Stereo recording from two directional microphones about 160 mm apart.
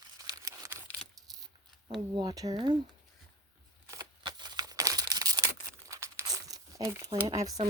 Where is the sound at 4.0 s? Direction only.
25° right (ahead or behind).